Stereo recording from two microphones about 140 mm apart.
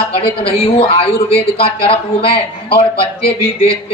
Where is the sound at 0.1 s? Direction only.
40° left (ahead or behind).